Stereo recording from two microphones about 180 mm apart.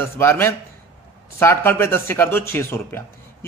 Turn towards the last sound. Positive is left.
turn(degrees=15)  # may be behind; listen again after turning